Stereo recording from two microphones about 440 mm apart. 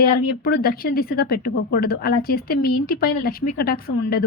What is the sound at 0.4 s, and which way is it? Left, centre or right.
Speech, centre.